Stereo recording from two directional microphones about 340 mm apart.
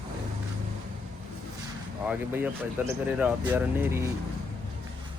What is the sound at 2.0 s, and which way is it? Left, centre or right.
Speech, centre.